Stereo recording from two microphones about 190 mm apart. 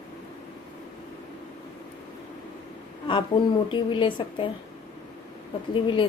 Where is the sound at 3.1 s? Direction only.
25° left (ahead or behind).